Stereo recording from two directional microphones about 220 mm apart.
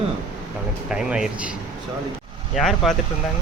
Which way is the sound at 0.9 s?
5° right (ahead or behind).